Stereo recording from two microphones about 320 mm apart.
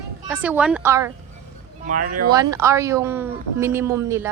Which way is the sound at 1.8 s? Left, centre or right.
Right.